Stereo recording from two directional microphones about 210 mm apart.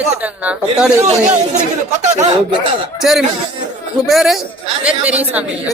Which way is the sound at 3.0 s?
Centre (ahead or behind).